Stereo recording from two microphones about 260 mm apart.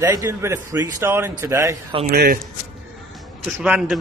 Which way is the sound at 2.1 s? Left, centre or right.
Right.